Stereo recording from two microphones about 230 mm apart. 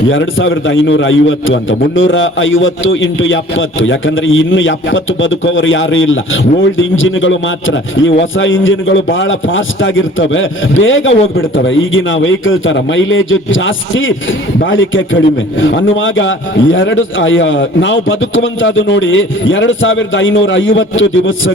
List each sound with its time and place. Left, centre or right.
0.1 s a man's voice: left